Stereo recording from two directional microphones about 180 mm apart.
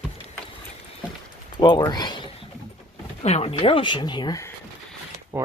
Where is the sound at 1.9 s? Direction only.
25° left (ahead or behind).